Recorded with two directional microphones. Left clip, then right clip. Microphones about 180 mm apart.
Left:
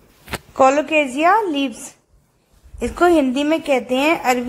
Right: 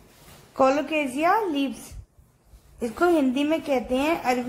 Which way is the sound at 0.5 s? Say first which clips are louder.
Left 7 dB; 25° left (ahead or behind).